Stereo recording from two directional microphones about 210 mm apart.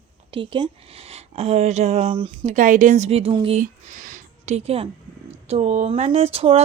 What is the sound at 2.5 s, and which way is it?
Speech, 40° right (ahead or behind).